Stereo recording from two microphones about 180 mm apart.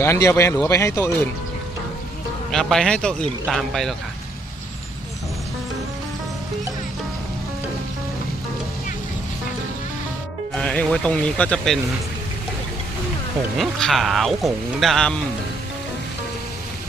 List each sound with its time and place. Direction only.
0.0 s speech: 15° left (ahead or behind)
2.5 s speech: centre (ahead or behind)
10.5 s speech: 5° left (ahead or behind)
13.6 s speech: centre (ahead or behind)